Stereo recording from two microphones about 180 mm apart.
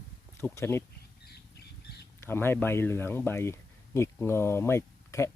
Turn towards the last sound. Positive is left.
turn(degrees=15)  # may be behind; listen again after turning